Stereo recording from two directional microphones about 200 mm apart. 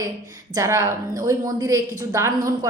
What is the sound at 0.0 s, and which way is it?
A woman's voice, 15° right (ahead or behind).